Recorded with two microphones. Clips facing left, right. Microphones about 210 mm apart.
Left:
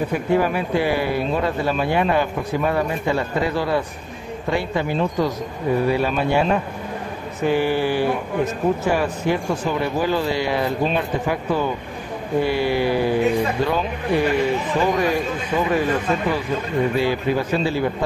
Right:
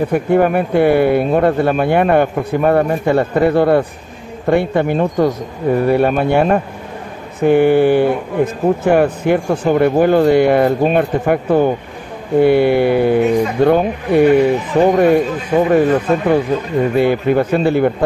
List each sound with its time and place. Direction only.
0.1 s speech: 55° right (ahead or behind)